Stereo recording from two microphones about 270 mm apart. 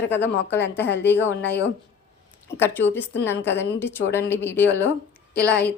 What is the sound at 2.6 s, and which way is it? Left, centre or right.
A woman's voice, centre.